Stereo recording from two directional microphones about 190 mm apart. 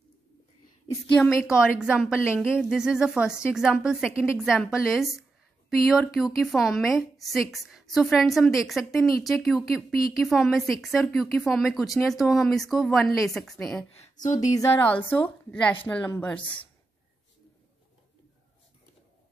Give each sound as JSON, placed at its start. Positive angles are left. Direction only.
{"t": 1.1, "sound": "a woman's voice", "side_deg": 0}
{"t": 13.9, "sound": "speech", "side_deg": 40}
{"t": 14.5, "sound": "a woman's voice", "side_deg": 15}